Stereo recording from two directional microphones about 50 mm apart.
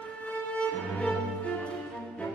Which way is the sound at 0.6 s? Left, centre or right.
Left.